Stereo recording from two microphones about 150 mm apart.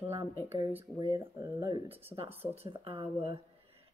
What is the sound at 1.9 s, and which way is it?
A woman's voice, 40° right (ahead or behind).